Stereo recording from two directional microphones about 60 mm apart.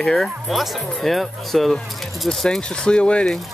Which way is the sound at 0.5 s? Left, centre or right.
Centre.